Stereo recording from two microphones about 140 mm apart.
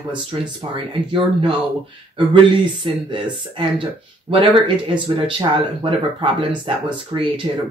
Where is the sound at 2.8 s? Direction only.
35° right (ahead or behind).